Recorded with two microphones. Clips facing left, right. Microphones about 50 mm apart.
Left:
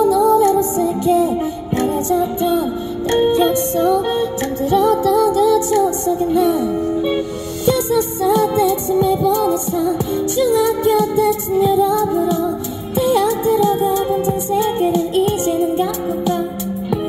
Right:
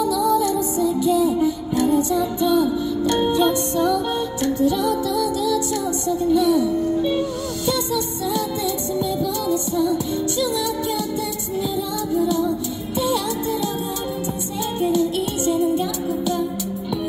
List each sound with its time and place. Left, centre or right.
0.0 s music: left